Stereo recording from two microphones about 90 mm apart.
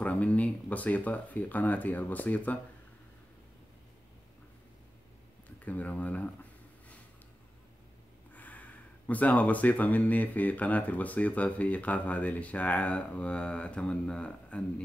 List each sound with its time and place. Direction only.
0.0 s speech: 15° left (ahead or behind)
5.7 s speech: 15° left (ahead or behind)
8.3 s speech: 15° left (ahead or behind)